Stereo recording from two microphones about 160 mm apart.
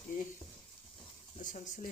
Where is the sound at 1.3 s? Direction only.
55° left (ahead or behind).